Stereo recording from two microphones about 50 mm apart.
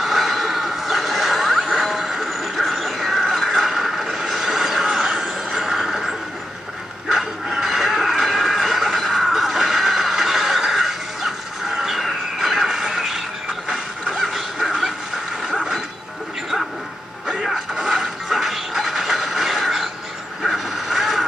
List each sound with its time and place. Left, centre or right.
0.0 s a sound: centre
15.4 s mechanisms: centre
17.3 s mechanisms: centre
20.4 s vehicle: centre